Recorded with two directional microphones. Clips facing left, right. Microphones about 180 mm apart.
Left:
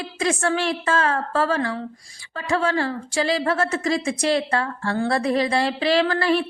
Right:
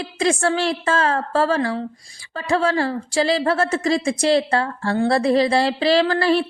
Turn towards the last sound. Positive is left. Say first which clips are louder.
# right 2 dB
turn(degrees=-35)  # may be behind; listen again after turning